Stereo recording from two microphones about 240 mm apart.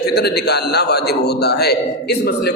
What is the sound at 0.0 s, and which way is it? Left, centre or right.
A man's voice, left.